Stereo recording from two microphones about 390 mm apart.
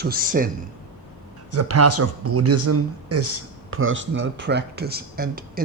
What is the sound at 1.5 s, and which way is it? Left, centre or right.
Speech, right.